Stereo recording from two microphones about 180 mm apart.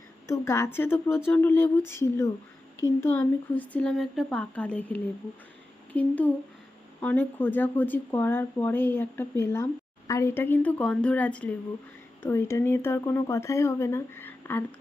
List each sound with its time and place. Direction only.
0.3 s speech: 15° left (ahead or behind)